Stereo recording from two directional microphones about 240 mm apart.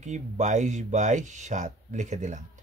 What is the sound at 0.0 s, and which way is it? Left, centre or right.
Speech, right.